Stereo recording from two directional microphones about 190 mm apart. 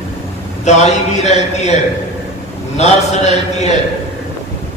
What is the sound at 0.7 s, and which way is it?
A man's voice, 35° left (ahead or behind).